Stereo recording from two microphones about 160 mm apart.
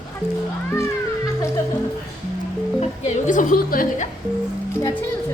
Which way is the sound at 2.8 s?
50° left (ahead or behind).